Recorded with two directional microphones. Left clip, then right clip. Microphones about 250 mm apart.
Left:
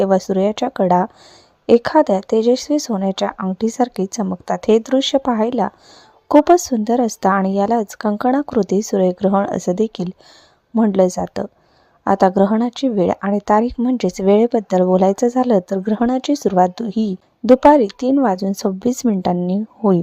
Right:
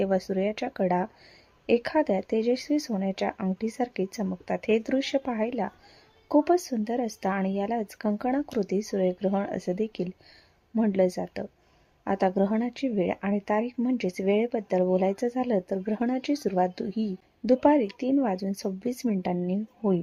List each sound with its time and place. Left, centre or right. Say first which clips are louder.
0.0 s speech: left 11 dB; left